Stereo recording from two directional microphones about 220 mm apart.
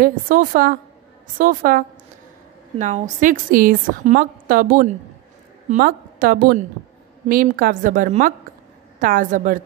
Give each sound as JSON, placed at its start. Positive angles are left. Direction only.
{"t": 0.0, "sound": "a woman's voice", "side_deg": -40}